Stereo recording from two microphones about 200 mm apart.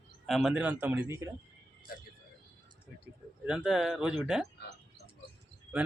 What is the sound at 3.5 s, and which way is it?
Speech, 5° right (ahead or behind).